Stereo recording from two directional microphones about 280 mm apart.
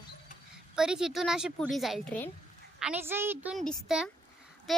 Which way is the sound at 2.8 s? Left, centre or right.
Centre.